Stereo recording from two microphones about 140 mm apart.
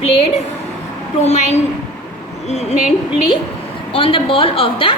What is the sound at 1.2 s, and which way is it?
Speech, 55° left (ahead or behind).